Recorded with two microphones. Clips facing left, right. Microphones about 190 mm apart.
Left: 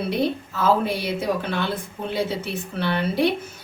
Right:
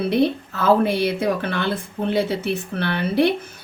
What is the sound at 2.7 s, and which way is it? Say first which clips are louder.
Speech: left 4 dB; 60° right (ahead or behind).